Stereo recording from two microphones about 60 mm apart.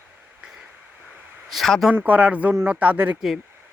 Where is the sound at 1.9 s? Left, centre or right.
Right.